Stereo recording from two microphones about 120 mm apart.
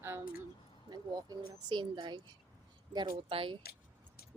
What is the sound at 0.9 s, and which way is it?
Speech, 35° right (ahead or behind).